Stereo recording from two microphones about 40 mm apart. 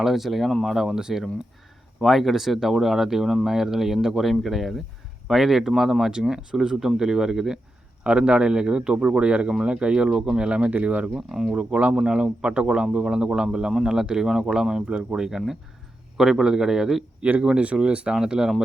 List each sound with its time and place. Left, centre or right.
0.0 s speech: centre
8.0 s speech: right
10.7 s speech: right
11.3 s speech: centre
11.5 s speech: right
15.2 s speech: centre
17.4 s speech: right